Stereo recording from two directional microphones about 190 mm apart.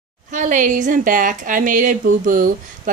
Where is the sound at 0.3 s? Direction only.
40° right (ahead or behind).